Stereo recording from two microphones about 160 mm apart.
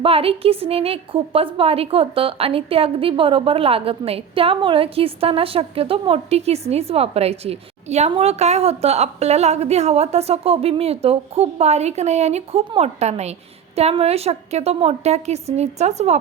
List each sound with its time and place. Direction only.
0.0 s a woman's voice: 35° right (ahead or behind)